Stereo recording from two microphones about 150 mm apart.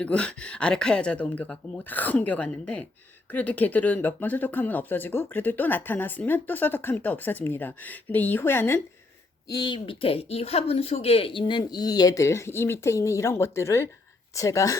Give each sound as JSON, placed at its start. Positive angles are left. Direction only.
{"t": 0.0, "sound": "speech", "side_deg": 5}
{"t": 9.5, "sound": "speech", "side_deg": 30}